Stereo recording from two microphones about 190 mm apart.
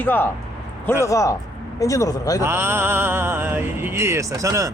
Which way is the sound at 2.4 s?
10° right (ahead or behind).